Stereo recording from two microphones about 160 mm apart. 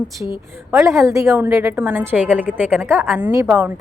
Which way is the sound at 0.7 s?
15° right (ahead or behind).